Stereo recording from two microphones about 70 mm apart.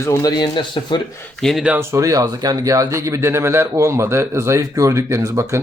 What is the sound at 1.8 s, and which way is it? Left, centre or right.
Speech, right.